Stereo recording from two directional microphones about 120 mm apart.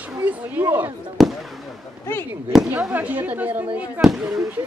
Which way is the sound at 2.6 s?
10° right (ahead or behind).